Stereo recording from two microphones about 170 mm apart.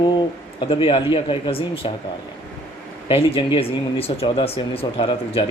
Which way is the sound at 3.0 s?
30° left (ahead or behind).